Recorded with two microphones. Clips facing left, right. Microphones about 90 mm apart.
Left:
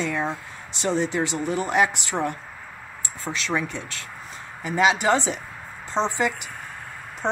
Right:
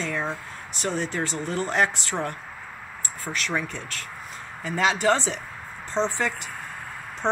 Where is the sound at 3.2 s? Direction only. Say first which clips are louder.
Left 2 dB; 20° left (ahead or behind).